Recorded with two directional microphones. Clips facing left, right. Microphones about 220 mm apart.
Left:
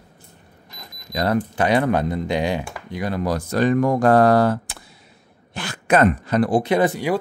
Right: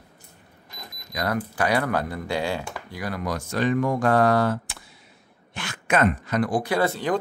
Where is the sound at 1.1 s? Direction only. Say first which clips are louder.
Left 6 dB; 30° left (ahead or behind).